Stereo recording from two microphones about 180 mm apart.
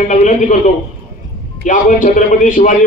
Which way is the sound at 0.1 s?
45° left (ahead or behind).